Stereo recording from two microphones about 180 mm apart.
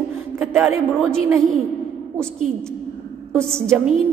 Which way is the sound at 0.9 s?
5° left (ahead or behind).